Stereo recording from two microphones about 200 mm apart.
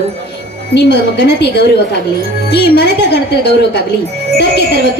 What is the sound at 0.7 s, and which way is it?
A woman's voice, 60° left (ahead or behind).